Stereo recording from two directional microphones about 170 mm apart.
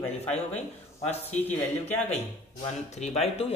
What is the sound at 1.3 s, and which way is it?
Speech, 10° left (ahead or behind).